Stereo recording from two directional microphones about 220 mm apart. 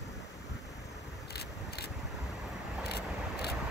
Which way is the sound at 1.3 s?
45° left (ahead or behind).